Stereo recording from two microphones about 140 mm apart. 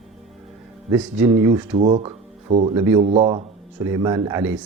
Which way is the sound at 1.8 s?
45° right (ahead or behind).